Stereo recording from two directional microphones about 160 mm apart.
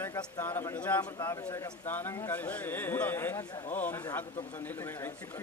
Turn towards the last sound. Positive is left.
turn(degrees=15)  # may be behind; listen again after turning